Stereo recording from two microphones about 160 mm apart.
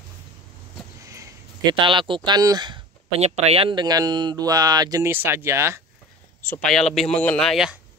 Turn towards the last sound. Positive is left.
turn(degrees=0)  # may be behind; listen again after turning